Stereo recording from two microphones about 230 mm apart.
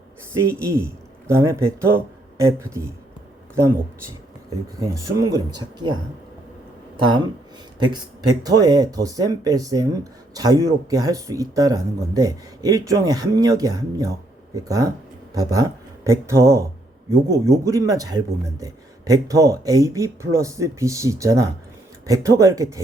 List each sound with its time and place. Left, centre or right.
0.3 s speech: centre
4.8 s speech: centre
7.8 s speech: centre